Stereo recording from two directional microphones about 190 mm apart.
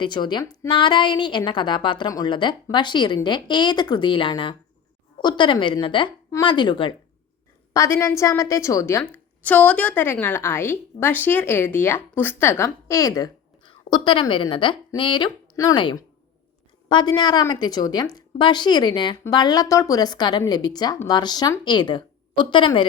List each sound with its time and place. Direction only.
0.0 s a woman's voice: 25° left (ahead or behind)